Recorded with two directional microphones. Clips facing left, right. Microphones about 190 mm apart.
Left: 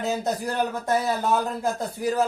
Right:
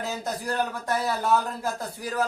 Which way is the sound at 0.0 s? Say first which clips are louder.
Left 5 dB; 20° left (ahead or behind).